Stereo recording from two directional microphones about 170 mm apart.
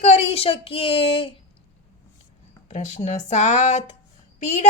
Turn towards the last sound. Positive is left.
turn(degrees=40)  # may be behind; listen again after turning